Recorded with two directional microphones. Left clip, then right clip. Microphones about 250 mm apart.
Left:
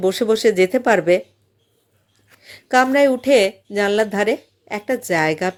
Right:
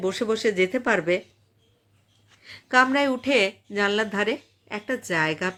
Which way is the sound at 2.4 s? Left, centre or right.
Centre.